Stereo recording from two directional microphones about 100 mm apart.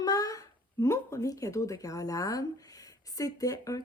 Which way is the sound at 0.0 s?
40° left (ahead or behind).